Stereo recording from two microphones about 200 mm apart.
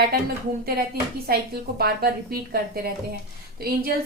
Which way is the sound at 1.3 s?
50° right (ahead or behind).